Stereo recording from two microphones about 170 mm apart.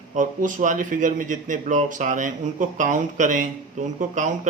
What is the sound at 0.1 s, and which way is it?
Speech, 50° right (ahead or behind).